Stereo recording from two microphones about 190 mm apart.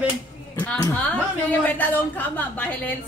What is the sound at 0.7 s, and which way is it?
Speech, 10° left (ahead or behind).